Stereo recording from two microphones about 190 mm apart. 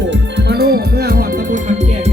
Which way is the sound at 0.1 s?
65° right (ahead or behind).